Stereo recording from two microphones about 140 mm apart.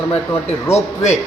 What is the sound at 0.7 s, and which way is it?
Speech, 55° left (ahead or behind).